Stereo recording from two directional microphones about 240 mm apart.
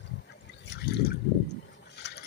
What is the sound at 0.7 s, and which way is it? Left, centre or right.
Water, left.